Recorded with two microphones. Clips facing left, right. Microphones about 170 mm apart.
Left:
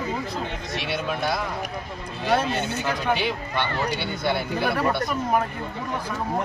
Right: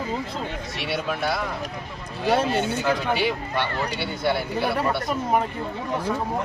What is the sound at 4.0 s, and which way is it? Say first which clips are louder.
Speech: right 1 dB; 5° right (ahead or behind).